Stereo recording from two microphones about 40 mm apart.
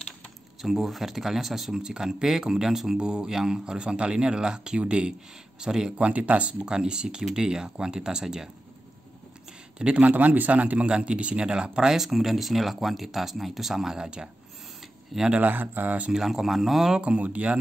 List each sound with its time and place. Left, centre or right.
0.6 s speech: centre
3.0 s speech: right
4.8 s a man's voice: right
5.6 s speech: centre
5.9 s a man's voice: right
6.7 s speech: right
9.8 s speech: right
10.0 s a man's voice: right
10.9 s speech: right
15.1 s speech: centre
15.4 s speech: right
16.1 s speech: centre
17.0 s a man's voice: right